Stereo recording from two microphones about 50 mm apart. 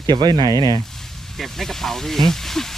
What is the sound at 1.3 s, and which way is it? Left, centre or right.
Speech, centre.